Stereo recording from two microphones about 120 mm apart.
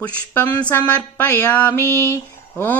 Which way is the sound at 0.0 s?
15° left (ahead or behind).